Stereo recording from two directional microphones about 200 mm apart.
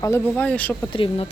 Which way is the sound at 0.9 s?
25° left (ahead or behind).